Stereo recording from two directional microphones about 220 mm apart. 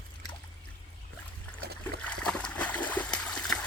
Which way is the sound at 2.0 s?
5° left (ahead or behind).